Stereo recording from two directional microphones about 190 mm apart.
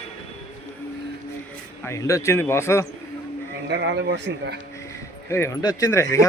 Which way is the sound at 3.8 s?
65° right (ahead or behind).